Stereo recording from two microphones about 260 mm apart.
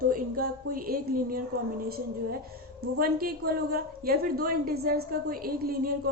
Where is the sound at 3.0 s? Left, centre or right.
Right.